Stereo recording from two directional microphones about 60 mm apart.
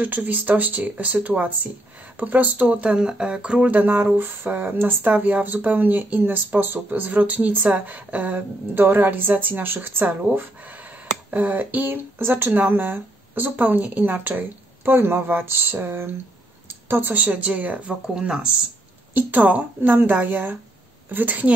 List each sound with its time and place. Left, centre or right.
0.0 s speech: right
2.6 s speech: centre
18.0 s speech: centre
19.1 s speech: right